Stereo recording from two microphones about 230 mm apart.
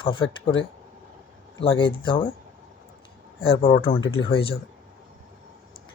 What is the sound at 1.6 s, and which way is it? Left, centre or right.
Speech, left.